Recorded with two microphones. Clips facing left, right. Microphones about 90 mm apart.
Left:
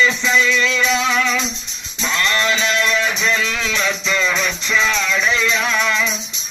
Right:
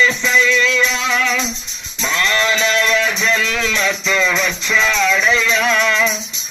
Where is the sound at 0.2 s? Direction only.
15° left (ahead or behind).